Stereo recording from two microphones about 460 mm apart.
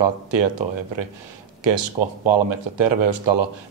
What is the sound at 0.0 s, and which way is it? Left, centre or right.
Speech, right.